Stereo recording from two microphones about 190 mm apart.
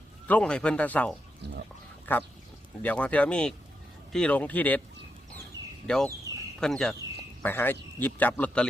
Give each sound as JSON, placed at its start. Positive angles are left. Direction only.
{"t": 0.3, "sound": "speech", "side_deg": 5}
{"t": 1.4, "sound": "chicken", "side_deg": -60}
{"t": 2.1, "sound": "speech", "side_deg": 10}
{"t": 5.8, "sound": "speech", "side_deg": 5}
{"t": 6.3, "sound": "a sound", "side_deg": -20}
{"t": 6.6, "sound": "speech", "side_deg": 5}